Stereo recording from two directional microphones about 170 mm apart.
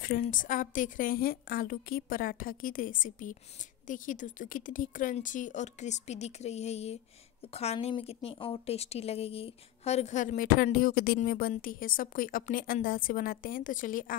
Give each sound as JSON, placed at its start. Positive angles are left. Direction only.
{"t": 0.0, "sound": "a woman's voice", "side_deg": 55}